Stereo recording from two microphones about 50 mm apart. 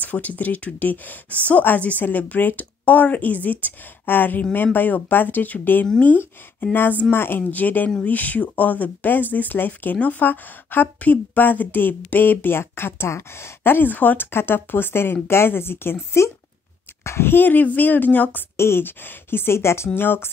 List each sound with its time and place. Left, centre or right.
0.0 s speech: left
17.0 s speech: left
17.3 s speech: left
18.6 s a woman's voice: left
19.9 s speech: left